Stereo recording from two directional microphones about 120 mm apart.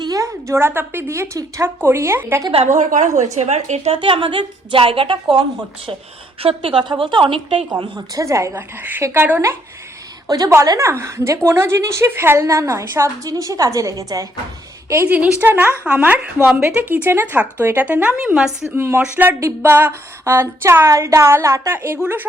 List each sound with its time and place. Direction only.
0.0 s a woman's voice: 30° right (ahead or behind)
2.6 s a woman's voice: 80° right
3.9 s a woman's voice: 45° right (ahead or behind); by 9.6 s 20° right (ahead or behind)
10.2 s a woman's voice: 30° right (ahead or behind)
14.8 s speech: 20° right (ahead or behind)
18.8 s a woman's voice: 20° right (ahead or behind)